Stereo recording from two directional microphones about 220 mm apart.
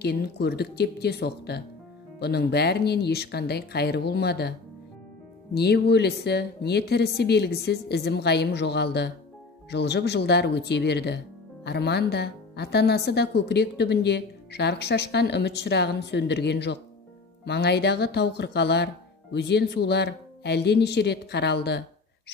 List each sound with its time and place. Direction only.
0.0 s speech: 45° left (ahead or behind)